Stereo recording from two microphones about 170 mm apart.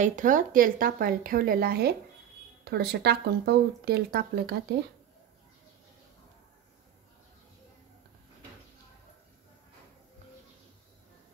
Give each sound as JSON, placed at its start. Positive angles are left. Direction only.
{"t": 0.0, "sound": "a woman's voice", "side_deg": -50}